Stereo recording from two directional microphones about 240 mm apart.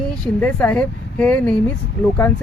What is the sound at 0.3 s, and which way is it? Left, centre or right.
Speech, centre.